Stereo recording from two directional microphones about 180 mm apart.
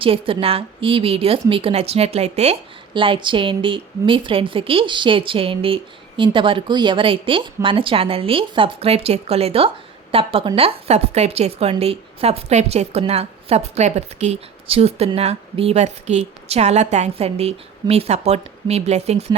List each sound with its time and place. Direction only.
0.0 s a woman's voice: 30° right (ahead or behind)